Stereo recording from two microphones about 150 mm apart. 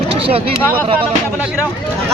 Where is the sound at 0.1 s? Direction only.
40° right (ahead or behind).